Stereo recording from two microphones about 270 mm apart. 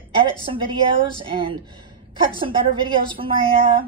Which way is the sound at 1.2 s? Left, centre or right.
Centre.